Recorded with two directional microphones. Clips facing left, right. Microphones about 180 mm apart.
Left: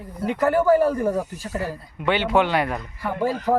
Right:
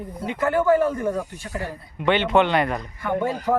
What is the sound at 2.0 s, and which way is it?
Speech, 5° left (ahead or behind).